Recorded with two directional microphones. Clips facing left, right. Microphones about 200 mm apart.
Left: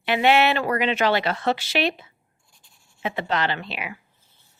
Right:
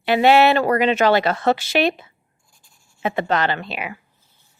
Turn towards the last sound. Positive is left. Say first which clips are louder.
# right 4 dB
turn(degrees=-50)  # may be behind; listen again after turning